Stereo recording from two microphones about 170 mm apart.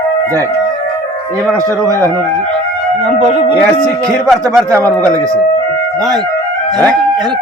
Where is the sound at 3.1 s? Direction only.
40° right (ahead or behind).